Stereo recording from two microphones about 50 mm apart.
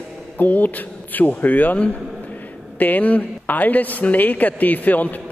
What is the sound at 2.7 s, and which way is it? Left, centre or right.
Speech, left.